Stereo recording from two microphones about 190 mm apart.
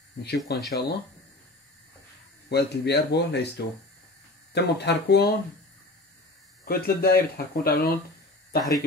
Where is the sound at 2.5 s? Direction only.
60° left (ahead or behind).